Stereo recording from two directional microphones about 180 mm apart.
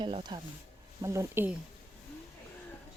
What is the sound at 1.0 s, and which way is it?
Speech, 15° right (ahead or behind).